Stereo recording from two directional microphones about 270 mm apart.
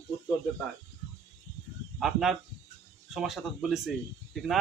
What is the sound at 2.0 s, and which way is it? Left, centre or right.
Speech, centre.